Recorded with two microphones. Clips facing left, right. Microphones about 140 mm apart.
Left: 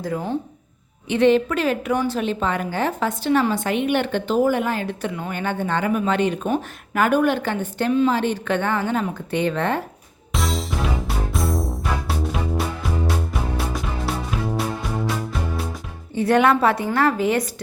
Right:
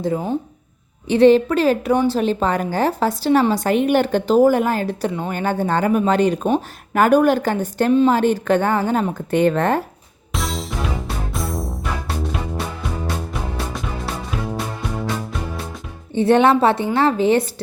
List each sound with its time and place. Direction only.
0.0 s a woman's voice: 20° right (ahead or behind)
1.0 s a woman's voice: 35° right (ahead or behind)
10.3 s music: centre (ahead or behind)
16.1 s a woman's voice: 25° right (ahead or behind)